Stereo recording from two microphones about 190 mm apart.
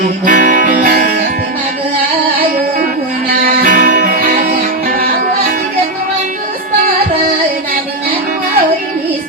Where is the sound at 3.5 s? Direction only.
45° right (ahead or behind).